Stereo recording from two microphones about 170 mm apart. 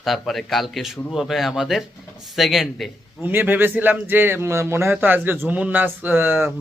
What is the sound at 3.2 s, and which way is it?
Speech, 10° right (ahead or behind).